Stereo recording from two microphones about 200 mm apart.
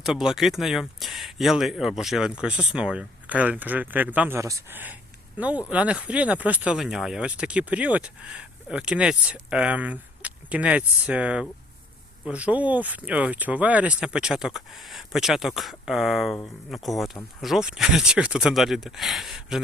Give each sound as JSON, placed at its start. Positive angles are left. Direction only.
{"t": 0.0, "sound": "speech", "side_deg": 0}